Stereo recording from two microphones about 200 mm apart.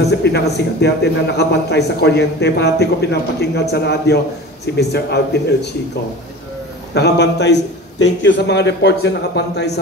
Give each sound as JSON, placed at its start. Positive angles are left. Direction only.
{"t": 0.0, "sound": "a man's voice", "side_deg": 55}
{"t": 6.9, "sound": "a man's voice", "side_deg": 55}